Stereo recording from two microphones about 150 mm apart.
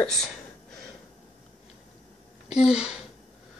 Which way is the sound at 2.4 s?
5° right (ahead or behind).